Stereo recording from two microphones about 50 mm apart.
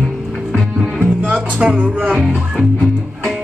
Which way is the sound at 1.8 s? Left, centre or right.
Right.